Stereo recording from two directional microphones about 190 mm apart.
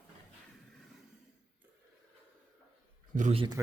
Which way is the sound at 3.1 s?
40° right (ahead or behind).